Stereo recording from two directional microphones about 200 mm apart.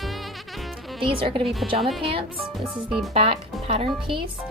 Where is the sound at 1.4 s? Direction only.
Centre (ahead or behind).